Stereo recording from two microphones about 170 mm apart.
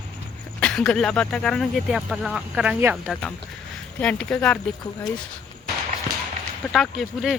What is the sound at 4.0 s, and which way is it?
Speech, 5° left (ahead or behind).